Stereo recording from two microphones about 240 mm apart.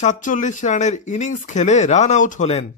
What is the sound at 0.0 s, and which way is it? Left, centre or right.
Speech, left.